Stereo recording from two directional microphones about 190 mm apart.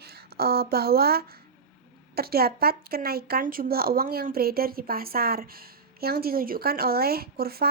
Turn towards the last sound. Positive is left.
turn(degrees=-55)  # may be behind; listen again after turning